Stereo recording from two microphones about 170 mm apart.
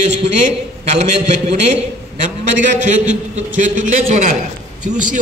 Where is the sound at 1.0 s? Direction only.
40° right (ahead or behind).